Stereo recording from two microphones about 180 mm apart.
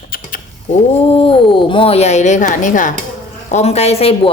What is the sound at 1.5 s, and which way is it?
A woman's voice, 30° left (ahead or behind).